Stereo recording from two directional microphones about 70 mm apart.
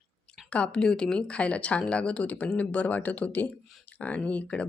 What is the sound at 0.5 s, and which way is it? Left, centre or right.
Speech, centre.